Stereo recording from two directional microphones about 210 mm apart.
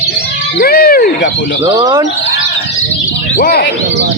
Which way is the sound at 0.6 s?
45° left (ahead or behind).